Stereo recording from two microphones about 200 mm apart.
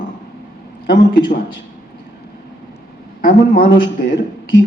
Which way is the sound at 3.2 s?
45° left (ahead or behind).